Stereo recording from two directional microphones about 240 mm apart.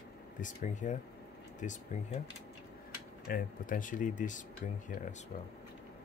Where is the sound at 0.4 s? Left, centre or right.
Left.